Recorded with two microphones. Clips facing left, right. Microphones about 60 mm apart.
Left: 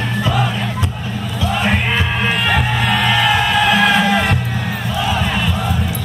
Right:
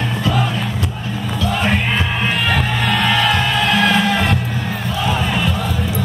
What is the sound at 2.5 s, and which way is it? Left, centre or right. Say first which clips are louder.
Music: left 1 dB; centre.